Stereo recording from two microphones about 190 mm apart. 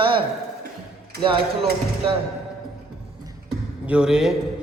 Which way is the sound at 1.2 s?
25° right (ahead or behind).